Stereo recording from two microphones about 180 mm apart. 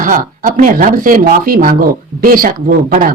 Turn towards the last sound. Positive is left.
turn(degrees=-50)  # may be behind; listen again after turning